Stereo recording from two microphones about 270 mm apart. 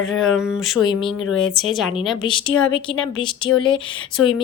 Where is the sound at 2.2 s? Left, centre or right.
Centre.